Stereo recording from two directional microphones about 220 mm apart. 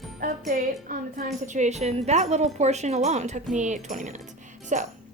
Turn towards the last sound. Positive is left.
turn(degrees=-35)  # may be behind; listen again after turning